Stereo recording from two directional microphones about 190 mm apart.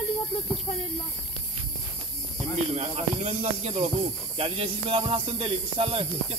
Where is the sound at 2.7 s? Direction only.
35° right (ahead or behind).